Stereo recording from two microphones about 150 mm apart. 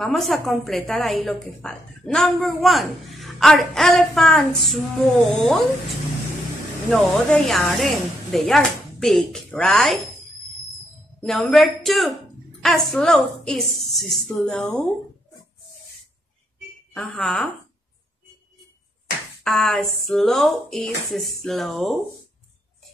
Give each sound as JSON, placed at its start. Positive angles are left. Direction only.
{"t": 0.0, "sound": "a woman's voice", "side_deg": 0}
{"t": 6.9, "sound": "a woman's voice", "side_deg": 5}
{"t": 11.1, "sound": "a woman's voice", "side_deg": 0}
{"t": 16.9, "sound": "speech", "side_deg": 5}
{"t": 19.4, "sound": "a woman's voice", "side_deg": 5}